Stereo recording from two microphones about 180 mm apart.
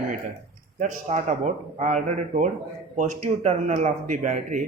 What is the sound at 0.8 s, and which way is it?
Speech, 40° right (ahead or behind).